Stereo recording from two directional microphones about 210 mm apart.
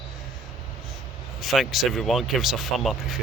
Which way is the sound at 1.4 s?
Centre (ahead or behind).